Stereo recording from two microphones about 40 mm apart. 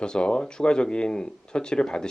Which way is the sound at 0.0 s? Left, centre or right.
Left.